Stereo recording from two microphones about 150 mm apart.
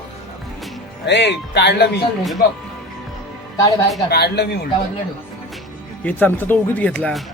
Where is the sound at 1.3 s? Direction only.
90° left.